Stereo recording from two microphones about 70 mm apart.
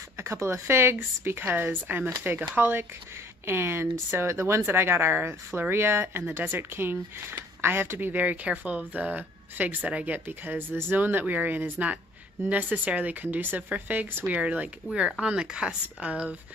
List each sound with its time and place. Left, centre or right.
0.2 s speech: right; by 16.3 s centre